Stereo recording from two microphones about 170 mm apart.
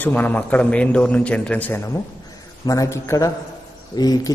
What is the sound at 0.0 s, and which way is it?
A man's voice, 10° left (ahead or behind).